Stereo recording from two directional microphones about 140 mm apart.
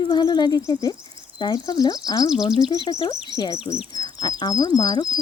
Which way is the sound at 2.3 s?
5° right (ahead or behind).